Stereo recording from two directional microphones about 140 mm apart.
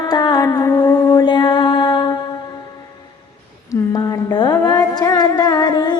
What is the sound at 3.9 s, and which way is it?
Music, 30° left (ahead or behind).